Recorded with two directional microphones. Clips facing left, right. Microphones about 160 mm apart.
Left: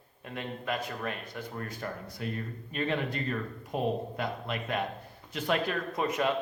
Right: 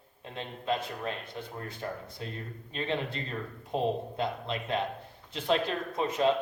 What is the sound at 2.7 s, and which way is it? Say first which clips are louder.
Speech: left 2 dB; 25° right (ahead or behind).